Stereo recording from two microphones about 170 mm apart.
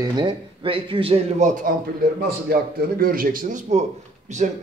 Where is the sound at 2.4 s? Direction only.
60° right (ahead or behind).